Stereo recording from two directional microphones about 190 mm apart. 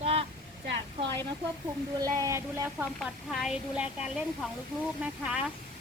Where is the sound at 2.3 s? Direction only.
15° right (ahead or behind).